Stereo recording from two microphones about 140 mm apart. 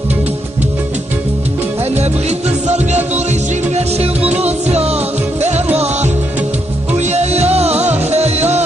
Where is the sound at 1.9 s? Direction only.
50° right (ahead or behind).